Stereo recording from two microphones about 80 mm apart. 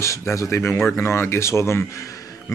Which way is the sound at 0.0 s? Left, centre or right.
Left.